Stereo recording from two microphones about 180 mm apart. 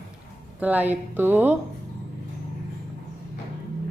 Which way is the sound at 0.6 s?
10° right (ahead or behind).